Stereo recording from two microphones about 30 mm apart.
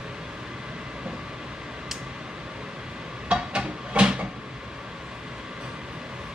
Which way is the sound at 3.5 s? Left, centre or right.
Right.